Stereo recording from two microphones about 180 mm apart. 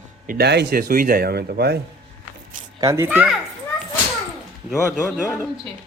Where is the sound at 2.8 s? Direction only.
15° right (ahead or behind).